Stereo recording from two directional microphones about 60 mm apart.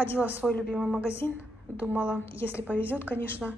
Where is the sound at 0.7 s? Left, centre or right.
Centre.